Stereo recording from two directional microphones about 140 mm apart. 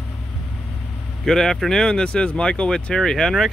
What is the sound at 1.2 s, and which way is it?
Speech, 5° left (ahead or behind).